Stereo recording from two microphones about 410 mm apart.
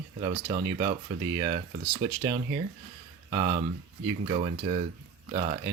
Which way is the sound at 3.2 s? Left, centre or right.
Centre.